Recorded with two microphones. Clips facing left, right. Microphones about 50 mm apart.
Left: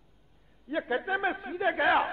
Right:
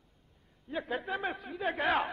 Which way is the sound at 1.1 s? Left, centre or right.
Centre.